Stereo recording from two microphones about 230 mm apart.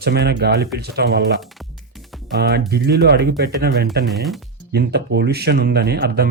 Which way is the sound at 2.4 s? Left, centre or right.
Right.